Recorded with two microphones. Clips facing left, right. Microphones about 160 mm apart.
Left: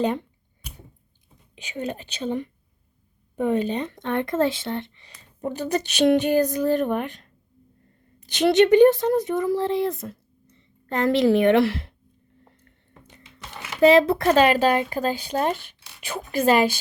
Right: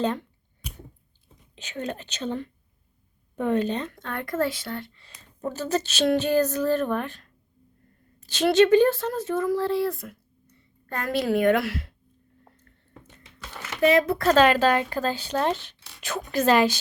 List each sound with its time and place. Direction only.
0.0 s speech: 15° left (ahead or behind)
1.5 s speech: 10° left (ahead or behind)
12.5 s a sound: 15° left (ahead or behind)
13.8 s speech: 30° left (ahead or behind)
14.3 s speech: 10° left (ahead or behind)